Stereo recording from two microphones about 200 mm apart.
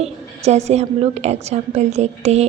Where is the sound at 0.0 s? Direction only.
35° right (ahead or behind).